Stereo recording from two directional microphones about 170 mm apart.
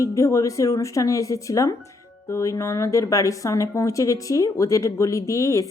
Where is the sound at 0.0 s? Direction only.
20° left (ahead or behind).